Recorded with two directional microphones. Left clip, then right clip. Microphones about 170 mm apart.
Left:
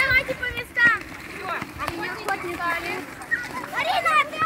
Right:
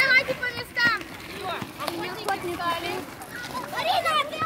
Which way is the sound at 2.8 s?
30° right (ahead or behind).